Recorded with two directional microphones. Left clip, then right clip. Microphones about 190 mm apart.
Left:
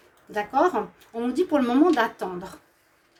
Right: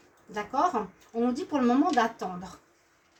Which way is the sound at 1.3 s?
50° left (ahead or behind).